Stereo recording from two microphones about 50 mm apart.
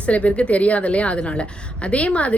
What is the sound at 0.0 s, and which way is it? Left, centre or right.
A woman's voice, left.